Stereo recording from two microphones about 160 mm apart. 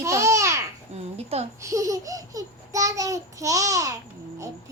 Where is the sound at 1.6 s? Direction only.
20° right (ahead or behind).